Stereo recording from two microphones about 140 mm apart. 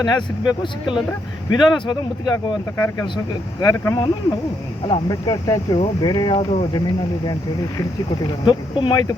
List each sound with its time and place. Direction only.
0.0 s speech: 30° left (ahead or behind)